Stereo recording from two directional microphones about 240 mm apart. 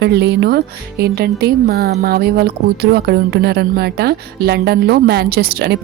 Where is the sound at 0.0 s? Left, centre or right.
Right.